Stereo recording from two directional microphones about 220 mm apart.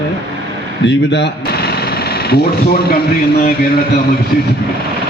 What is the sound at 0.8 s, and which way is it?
Speech, 50° left (ahead or behind).